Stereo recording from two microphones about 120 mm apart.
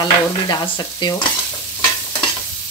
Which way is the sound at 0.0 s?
35° left (ahead or behind).